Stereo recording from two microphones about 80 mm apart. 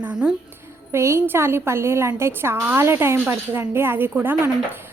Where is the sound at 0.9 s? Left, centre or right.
Right.